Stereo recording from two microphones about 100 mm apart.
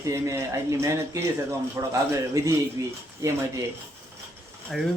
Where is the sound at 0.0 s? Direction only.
30° right (ahead or behind).